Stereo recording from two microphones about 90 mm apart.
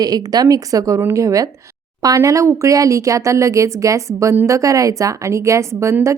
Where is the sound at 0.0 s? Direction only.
45° right (ahead or behind).